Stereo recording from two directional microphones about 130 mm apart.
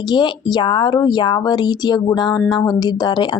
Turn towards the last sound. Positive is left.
turn(degrees=30)  # may be behind; listen again after turning